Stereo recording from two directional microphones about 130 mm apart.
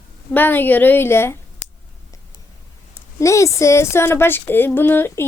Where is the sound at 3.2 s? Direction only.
25° left (ahead or behind).